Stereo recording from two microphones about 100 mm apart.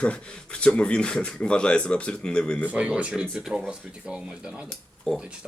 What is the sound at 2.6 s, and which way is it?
Speech, 10° right (ahead or behind).